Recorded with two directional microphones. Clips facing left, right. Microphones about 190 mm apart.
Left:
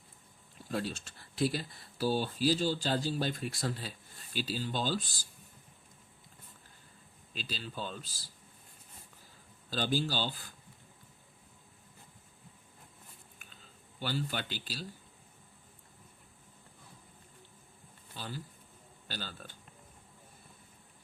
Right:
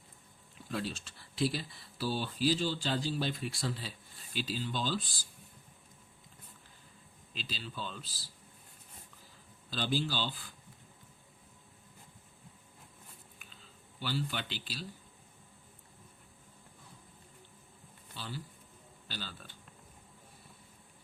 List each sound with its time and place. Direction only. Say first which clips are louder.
0.7 s speech: left 2 dB; 45° left (ahead or behind)
7.3 s speech: left 2 dB; 45° left (ahead or behind)
9.6 s speech: left 1 dB; 45° left (ahead or behind)
14.0 s speech: left 1 dB; 45° left (ahead or behind)
18.2 s speech: left 1 dB; 45° left (ahead or behind)